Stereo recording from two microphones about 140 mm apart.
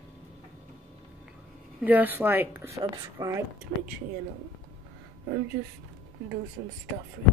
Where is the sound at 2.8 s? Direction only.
25° right (ahead or behind).